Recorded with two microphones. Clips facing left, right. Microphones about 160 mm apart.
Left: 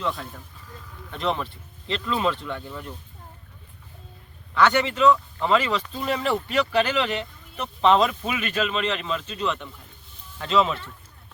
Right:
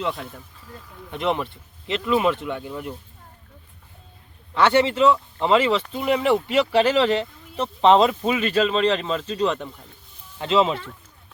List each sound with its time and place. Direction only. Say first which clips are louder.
1.1 s speech: right 3 dB; 15° right (ahead or behind)
4.5 s speech: right 3 dB; 30° right (ahead or behind)
10.3 s speech: right 2 dB; 25° right (ahead or behind)